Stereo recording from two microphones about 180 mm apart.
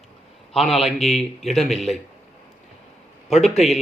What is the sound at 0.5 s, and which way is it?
A man's voice, centre (ahead or behind).